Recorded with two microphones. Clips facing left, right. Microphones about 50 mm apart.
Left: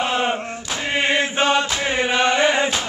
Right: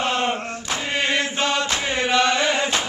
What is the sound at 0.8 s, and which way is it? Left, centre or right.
Chant, left.